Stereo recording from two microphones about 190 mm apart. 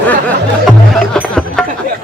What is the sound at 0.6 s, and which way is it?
Speech, centre (ahead or behind).